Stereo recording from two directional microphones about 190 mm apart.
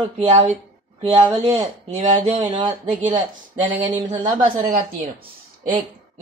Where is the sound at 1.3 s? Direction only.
35° right (ahead or behind).